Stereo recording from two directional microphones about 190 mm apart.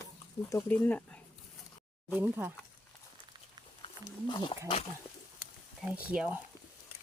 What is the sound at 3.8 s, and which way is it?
Wild animals, 25° left (ahead or behind).